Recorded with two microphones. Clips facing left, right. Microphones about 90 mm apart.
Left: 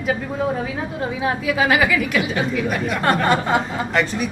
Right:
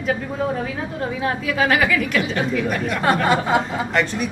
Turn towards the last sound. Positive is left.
turn(degrees=0)  # may be behind; listen again after turning